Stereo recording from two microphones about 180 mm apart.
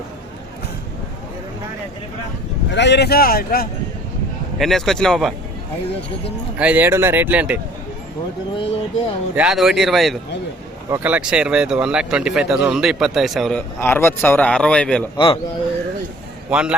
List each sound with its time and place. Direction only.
2.6 s speech: 75° left (ahead or behind); by 3.7 s 55° left (ahead or behind)
4.5 s speech: centre (ahead or behind)
6.6 s speech: 10° right (ahead or behind)
8.5 s speech: 30° left (ahead or behind)
9.3 s speech: 5° right (ahead or behind)
10.8 s speech: 10° right (ahead or behind); by 15.0 s 5° left (ahead or behind)
15.1 s a man's voice: 30° left (ahead or behind)
16.5 s speech: 5° right (ahead or behind)